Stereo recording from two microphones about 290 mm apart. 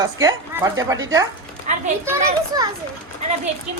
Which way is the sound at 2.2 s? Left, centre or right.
Centre.